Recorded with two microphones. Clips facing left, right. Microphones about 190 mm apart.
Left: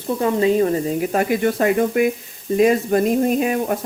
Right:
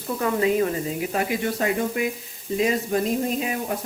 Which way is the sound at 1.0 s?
50° left (ahead or behind).